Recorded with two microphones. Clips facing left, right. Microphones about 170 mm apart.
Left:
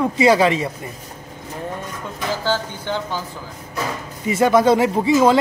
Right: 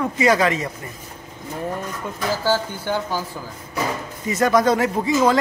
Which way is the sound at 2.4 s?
10° right (ahead or behind).